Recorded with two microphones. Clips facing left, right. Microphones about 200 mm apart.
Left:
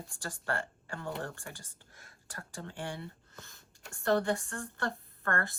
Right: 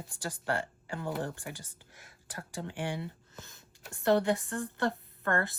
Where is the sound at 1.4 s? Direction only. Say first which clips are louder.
Right 4 dB; centre (ahead or behind).